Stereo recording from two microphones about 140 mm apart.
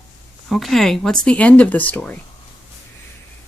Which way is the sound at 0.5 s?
Centre (ahead or behind).